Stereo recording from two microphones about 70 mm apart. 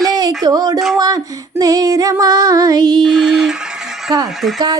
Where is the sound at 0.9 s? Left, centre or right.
Right.